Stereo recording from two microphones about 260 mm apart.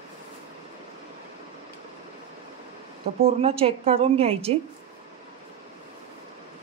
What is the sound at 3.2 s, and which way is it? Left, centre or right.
A woman's voice, right.